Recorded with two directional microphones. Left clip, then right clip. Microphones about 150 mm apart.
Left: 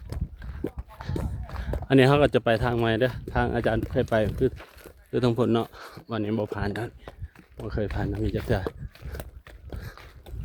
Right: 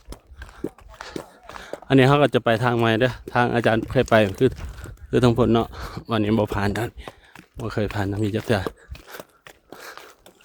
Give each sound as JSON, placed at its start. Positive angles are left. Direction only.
{"t": 0.1, "sound": "clip-clop", "side_deg": -40}
{"t": 0.9, "sound": "speech", "side_deg": -40}
{"t": 5.1, "sound": "speech", "side_deg": -40}
{"t": 7.6, "sound": "speech", "side_deg": -65}
{"t": 9.4, "sound": "a sound", "side_deg": -50}